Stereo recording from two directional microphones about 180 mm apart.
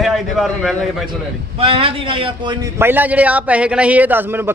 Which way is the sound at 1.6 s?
30° right (ahead or behind).